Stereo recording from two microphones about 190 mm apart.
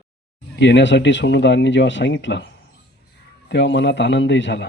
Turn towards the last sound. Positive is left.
turn(degrees=70)  # may be behind; listen again after turning